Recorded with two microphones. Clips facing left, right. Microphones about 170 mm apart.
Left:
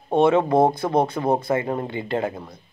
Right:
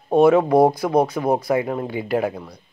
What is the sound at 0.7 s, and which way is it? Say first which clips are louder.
Speech: right 2 dB; 25° left (ahead or behind).